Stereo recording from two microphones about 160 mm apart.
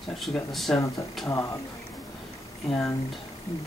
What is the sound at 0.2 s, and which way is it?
Speech, centre (ahead or behind).